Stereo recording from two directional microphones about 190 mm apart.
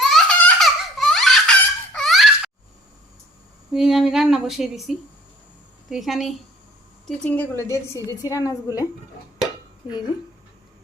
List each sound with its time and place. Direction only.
0.0 s baby laughter: 5° left (ahead or behind)
3.7 s a woman's voice: 5° right (ahead or behind); by 8.5 s 15° left (ahead or behind)